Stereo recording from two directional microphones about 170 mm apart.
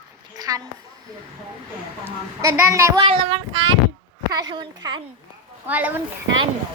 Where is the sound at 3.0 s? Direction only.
35° right (ahead or behind).